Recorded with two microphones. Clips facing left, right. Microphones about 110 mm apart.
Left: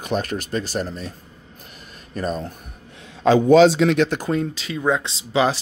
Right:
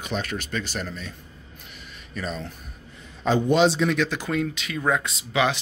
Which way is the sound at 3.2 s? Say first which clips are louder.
Left 7 dB; 90° left.